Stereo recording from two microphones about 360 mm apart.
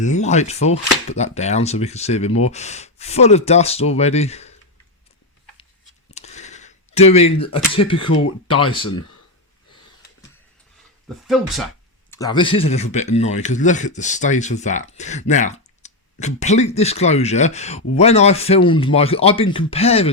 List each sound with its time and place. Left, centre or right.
0.0 s speech: centre
6.1 s a sound: centre
7.8 s speech: centre
12.1 s speech: centre